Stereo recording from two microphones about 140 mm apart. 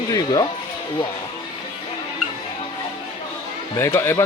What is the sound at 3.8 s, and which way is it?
Speech, 20° left (ahead or behind).